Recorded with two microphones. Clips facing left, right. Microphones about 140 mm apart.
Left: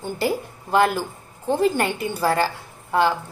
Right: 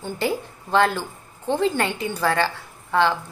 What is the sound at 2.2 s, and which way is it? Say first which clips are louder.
Speech: left 1 dB; 40° left (ahead or behind).